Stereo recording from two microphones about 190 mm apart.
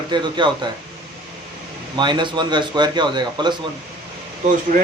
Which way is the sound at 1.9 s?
25° right (ahead or behind).